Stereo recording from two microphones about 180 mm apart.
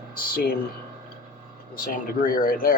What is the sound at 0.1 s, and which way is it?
Speech, 55° left (ahead or behind).